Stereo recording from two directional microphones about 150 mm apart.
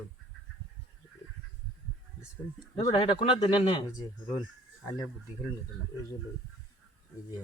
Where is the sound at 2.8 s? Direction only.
45° left (ahead or behind).